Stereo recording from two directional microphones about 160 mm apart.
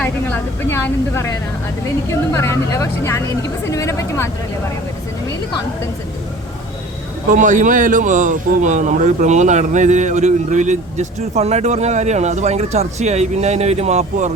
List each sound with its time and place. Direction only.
0.0 s a woman's voice: 15° left (ahead or behind)
7.3 s a man's voice: 50° right (ahead or behind)